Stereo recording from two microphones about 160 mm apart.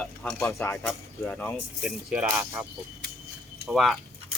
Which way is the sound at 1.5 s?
5° right (ahead or behind).